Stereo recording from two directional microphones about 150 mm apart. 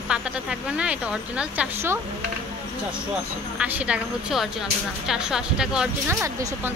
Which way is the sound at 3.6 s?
10° right (ahead or behind).